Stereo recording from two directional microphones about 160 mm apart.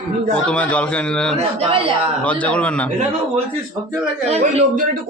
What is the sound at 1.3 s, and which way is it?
Speech, 35° right (ahead or behind).